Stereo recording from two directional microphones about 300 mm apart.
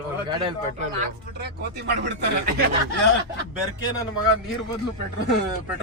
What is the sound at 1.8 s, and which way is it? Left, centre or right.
Speech, right.